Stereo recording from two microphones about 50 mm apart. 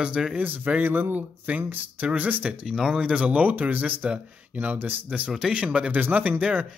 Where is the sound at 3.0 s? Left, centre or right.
Right.